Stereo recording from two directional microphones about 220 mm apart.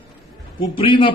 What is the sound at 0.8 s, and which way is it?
Speech, 25° left (ahead or behind).